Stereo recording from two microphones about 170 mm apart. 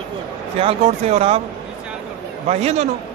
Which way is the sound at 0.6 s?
35° right (ahead or behind).